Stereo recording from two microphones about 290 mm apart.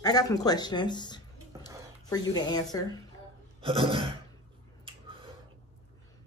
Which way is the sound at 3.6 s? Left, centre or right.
Centre.